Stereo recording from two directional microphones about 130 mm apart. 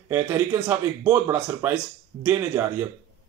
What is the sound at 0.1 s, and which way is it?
A man's voice, 20° right (ahead or behind).